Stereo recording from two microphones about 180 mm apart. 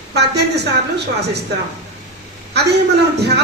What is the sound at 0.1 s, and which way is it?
A woman's voice, 65° right (ahead or behind).